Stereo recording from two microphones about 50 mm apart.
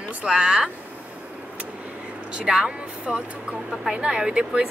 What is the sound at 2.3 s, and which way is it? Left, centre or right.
Speech, centre.